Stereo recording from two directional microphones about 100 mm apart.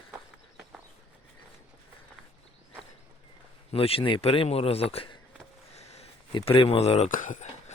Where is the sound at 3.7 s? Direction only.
70° left (ahead or behind).